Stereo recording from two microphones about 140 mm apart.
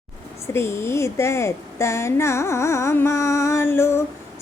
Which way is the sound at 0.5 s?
20° left (ahead or behind).